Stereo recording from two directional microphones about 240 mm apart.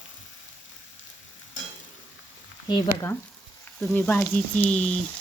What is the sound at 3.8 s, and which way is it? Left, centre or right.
Speech, centre.